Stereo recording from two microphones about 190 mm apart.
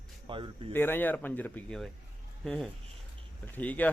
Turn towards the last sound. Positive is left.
turn(degrees=10)  # may be behind; listen again after turning